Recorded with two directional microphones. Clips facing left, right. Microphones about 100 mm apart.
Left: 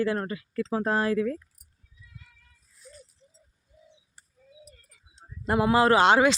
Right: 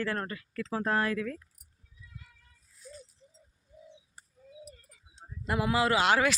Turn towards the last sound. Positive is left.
turn(degrees=25)  # may be behind; listen again after turning